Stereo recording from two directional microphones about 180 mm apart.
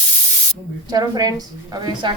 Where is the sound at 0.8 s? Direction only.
20° right (ahead or behind).